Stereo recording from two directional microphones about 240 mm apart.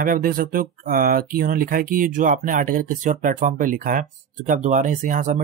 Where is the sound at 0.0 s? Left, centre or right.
Right.